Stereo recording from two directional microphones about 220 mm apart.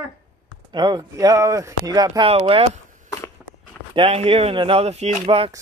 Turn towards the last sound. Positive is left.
turn(degrees=-25)  # may be behind; listen again after turning